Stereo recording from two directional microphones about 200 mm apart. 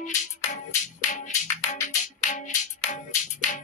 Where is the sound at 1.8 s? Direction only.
40° left (ahead or behind).